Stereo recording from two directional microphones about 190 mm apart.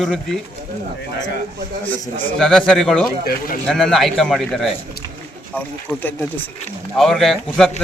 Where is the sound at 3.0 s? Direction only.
50° left (ahead or behind).